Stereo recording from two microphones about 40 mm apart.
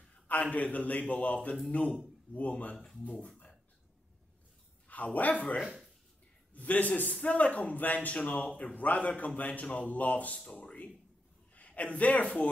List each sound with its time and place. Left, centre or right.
0.3 s a man's voice: left
3.1 s speech: left
4.8 s speech: left
5.6 s speech: centre
6.5 s a man's voice: left
10.6 s a sound: left
11.5 s a man's voice: left